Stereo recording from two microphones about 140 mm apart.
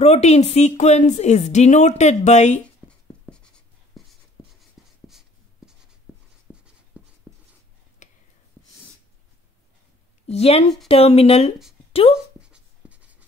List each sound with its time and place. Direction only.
0.0 s a woman's voice: 50° left (ahead or behind)
2.9 s writing: 5° left (ahead or behind)
6.5 s writing: 5° right (ahead or behind)
8.0 s whispering: 60° left (ahead or behind)
10.2 s a woman's voice: 45° left (ahead or behind)
12.4 s writing: 10° right (ahead or behind)